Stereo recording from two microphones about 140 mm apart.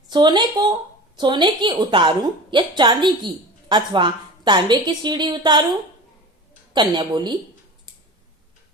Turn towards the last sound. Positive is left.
turn(degrees=-30)  # may be behind; listen again after turning